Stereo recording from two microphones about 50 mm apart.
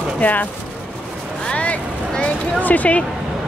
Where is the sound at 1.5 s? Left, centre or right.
Left.